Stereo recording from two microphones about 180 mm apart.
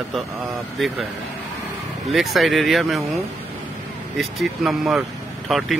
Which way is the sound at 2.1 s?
Centre (ahead or behind).